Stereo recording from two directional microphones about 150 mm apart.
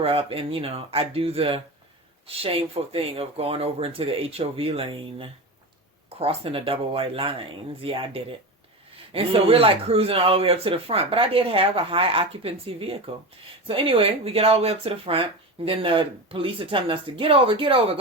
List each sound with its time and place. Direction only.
0.0 s speech: 40° right (ahead or behind)